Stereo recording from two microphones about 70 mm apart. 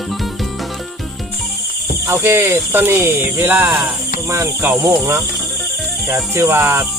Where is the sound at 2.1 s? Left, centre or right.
Right.